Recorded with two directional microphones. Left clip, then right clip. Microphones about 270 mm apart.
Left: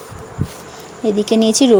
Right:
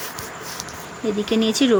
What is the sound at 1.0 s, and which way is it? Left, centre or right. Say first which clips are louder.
Speech: left 7 dB; centre.